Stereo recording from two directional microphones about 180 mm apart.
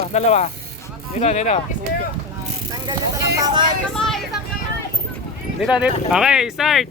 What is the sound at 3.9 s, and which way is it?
Vehicle, centre (ahead or behind).